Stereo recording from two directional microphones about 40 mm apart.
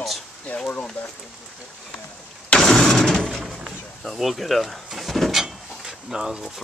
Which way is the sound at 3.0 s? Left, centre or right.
Centre.